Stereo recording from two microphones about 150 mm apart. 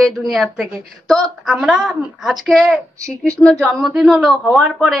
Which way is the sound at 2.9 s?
20° right (ahead or behind).